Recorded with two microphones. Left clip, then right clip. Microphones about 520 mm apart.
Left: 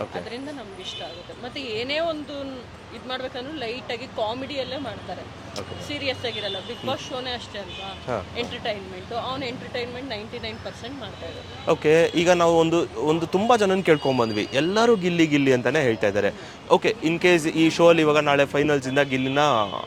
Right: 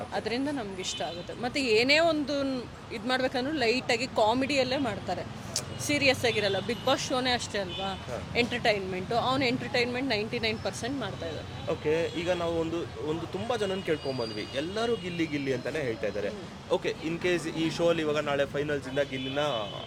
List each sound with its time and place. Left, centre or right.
1.5 s speech: right
11.7 s a man's voice: left